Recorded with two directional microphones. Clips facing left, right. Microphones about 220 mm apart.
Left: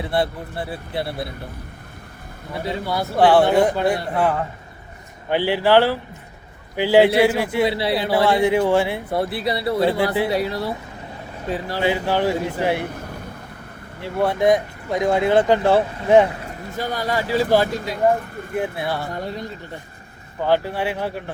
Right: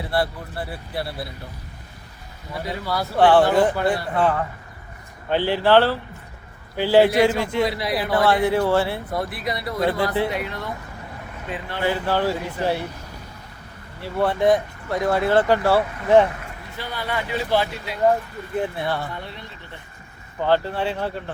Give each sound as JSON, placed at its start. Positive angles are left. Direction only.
{"t": 0.0, "sound": "speech", "side_deg": 20}
{"t": 2.8, "sound": "speech", "side_deg": 25}
{"t": 3.2, "sound": "speech", "side_deg": 10}
{"t": 7.7, "sound": "speech", "side_deg": 30}
{"t": 8.1, "sound": "speech", "side_deg": 10}
{"t": 9.1, "sound": "speech", "side_deg": 30}
{"t": 11.8, "sound": "speech", "side_deg": 15}
{"t": 14.0, "sound": "speech", "side_deg": 10}
{"t": 16.7, "sound": "speech", "side_deg": 45}
{"t": 18.8, "sound": "speech", "side_deg": 10}
{"t": 19.1, "sound": "speech", "side_deg": 40}
{"t": 20.4, "sound": "speech", "side_deg": 10}